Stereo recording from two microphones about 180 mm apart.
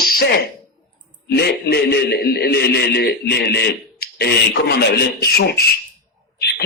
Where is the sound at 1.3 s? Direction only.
65° left (ahead or behind).